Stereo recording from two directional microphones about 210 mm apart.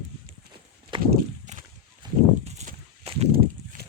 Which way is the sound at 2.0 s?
30° right (ahead or behind).